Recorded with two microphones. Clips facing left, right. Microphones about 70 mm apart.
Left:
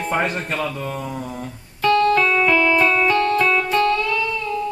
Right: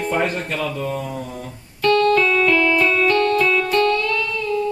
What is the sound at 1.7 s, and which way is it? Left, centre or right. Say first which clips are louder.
Music: even; centre.